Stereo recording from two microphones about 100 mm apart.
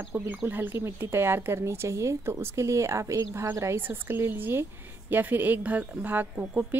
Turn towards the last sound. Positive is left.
turn(degrees=-20)  # may be behind; listen again after turning